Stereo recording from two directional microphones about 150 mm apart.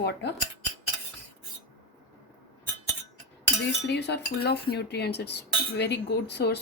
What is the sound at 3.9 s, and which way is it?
Cutlery, 90° left.